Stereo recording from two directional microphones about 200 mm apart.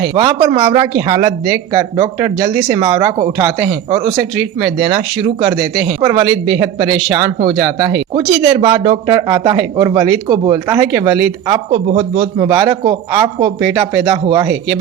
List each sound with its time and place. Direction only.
0.1 s speech: 25° right (ahead or behind)